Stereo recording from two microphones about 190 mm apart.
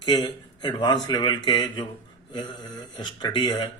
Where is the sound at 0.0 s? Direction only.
25° left (ahead or behind).